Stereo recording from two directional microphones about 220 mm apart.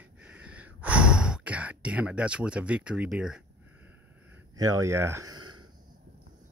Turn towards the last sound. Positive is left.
turn(degrees=-85)